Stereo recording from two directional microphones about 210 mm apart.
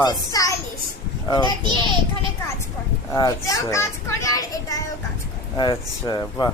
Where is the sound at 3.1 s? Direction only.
15° left (ahead or behind).